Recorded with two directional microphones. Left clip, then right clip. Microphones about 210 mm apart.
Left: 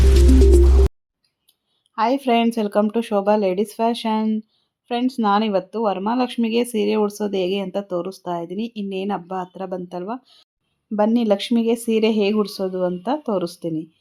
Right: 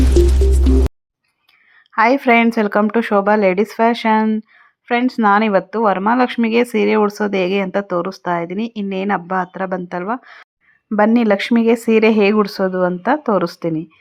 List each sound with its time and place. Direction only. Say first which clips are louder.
0.5 s music: left 1 dB; centre (ahead or behind)
2.0 s speech: right 6 dB; 15° right (ahead or behind)